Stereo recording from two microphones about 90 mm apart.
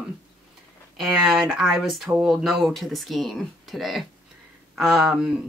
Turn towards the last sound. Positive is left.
turn(degrees=-10)  # may be behind; listen again after turning